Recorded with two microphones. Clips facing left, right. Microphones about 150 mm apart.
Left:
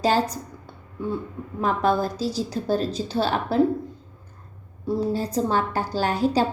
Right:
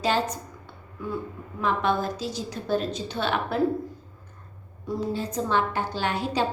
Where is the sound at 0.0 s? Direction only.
40° left (ahead or behind).